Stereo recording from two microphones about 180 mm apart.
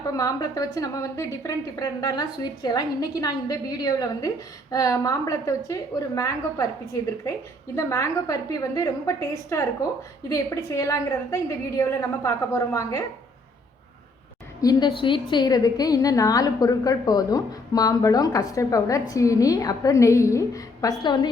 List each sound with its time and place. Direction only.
0.2 s a woman's voice: 20° left (ahead or behind)
7.8 s a woman's voice: 15° left (ahead or behind)
14.6 s a woman's voice: 20° left (ahead or behind)